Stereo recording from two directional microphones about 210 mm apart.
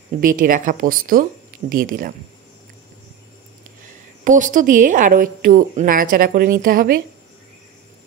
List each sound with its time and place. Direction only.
0.2 s a woman's voice: 40° right (ahead or behind)
3.8 s a woman's voice: 40° right (ahead or behind)